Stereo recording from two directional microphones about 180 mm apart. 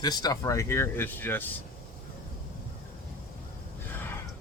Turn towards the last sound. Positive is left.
turn(degrees=10)  # may be behind; listen again after turning